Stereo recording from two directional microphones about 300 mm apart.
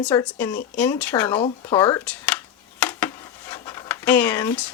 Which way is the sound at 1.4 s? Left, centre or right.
Centre.